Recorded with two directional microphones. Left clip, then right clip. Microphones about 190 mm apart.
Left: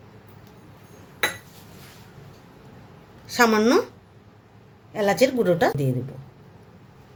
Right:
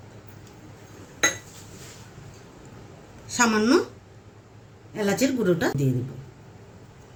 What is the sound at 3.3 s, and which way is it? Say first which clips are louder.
Speech: left 3 dB; 55° left (ahead or behind).